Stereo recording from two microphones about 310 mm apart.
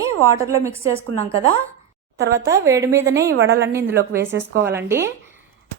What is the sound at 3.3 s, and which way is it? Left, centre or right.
Speech, right.